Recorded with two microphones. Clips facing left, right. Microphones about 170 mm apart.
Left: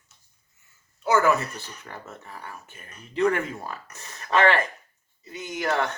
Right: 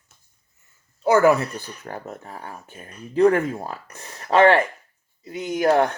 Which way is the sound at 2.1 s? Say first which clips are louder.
Right 5 dB; 55° right (ahead or behind).